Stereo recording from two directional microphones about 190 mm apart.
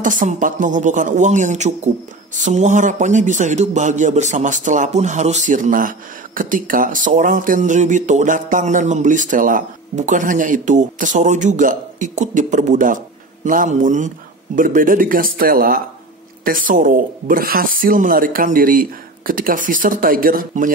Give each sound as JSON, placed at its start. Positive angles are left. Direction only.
{"t": 0.0, "sound": "a man's voice", "side_deg": -45}